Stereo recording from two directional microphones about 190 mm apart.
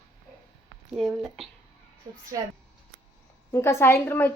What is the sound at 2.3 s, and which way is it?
Speech, 20° right (ahead or behind).